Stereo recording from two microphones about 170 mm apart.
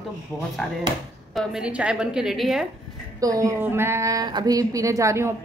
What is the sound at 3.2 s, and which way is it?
A woman's voice, 20° right (ahead or behind).